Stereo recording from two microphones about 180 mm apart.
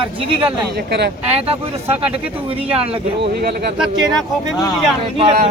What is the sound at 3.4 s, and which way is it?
Speech, 60° right (ahead or behind).